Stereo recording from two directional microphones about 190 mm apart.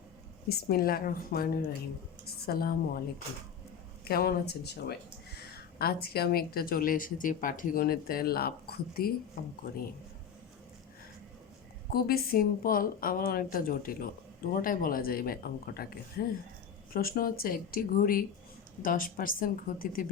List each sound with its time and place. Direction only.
0.4 s a woman's voice: 55° left (ahead or behind)
4.1 s speech: 55° left (ahead or behind)
11.9 s speech: 55° left (ahead or behind)